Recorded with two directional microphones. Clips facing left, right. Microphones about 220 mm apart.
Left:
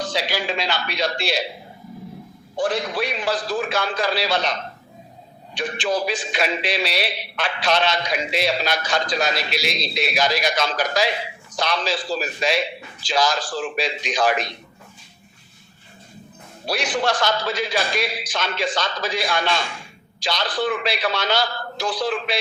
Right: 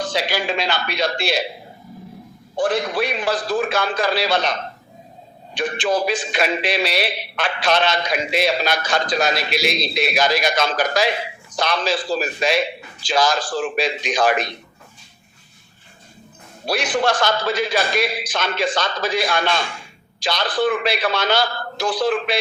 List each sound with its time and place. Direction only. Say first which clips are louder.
0.0 s a man's voice: right 2 dB; 50° right (ahead or behind)
2.6 s a man's voice: right 3 dB; 50° right (ahead or behind)
5.5 s a man's voice: right 3 dB; 50° right (ahead or behind)
16.6 s a man's voice: right 3 dB; 50° right (ahead or behind)